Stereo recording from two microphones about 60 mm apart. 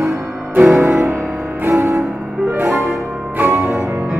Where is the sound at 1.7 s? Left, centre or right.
Right.